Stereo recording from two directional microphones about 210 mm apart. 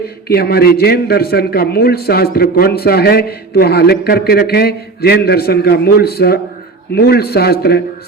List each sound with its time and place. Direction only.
0.3 s a man's voice: 50° left (ahead or behind)